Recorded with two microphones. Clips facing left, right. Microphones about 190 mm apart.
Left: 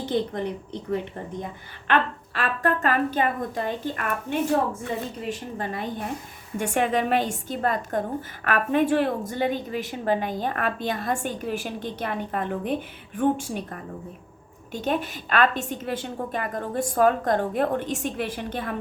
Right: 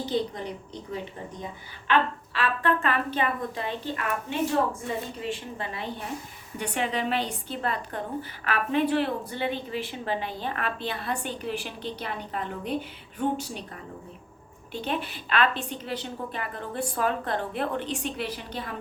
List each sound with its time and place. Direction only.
0.0 s a woman's voice: 55° left (ahead or behind)
1.9 s a woman's voice: 45° left (ahead or behind)
14.7 s a woman's voice: 45° left (ahead or behind)